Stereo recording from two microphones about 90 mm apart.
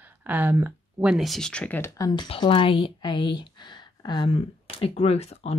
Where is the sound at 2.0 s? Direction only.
55° left (ahead or behind).